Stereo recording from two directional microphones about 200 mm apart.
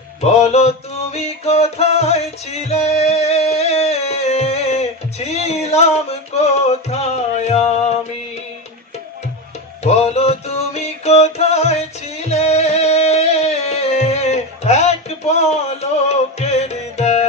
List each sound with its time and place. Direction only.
0.2 s music: 30° left (ahead or behind)
9.8 s music: 30° left (ahead or behind)